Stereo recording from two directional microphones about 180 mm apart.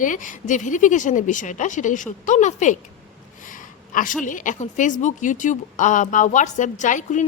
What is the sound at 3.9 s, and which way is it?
A woman's voice, 45° left (ahead or behind).